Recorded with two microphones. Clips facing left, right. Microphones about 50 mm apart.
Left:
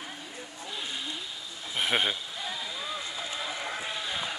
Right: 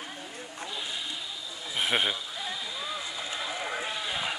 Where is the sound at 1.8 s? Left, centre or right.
Centre.